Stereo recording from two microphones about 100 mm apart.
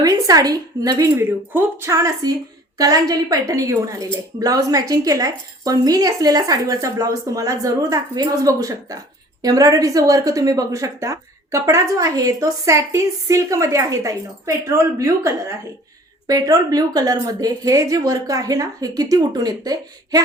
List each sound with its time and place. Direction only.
0.0 s a woman's voice: 35° right (ahead or behind)
2.2 s a woman's voice: 40° right (ahead or behind)